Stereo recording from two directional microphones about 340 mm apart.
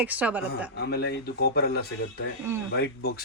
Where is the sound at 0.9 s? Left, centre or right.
Left.